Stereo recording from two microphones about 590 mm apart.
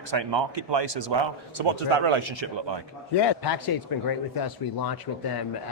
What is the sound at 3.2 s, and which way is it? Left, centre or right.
Speech, left.